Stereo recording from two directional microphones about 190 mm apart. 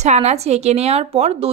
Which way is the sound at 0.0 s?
35° right (ahead or behind).